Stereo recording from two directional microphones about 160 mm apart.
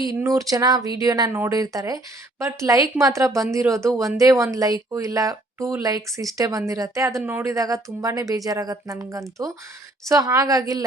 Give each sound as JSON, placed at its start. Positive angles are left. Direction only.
{"t": 0.0, "sound": "speech", "side_deg": -20}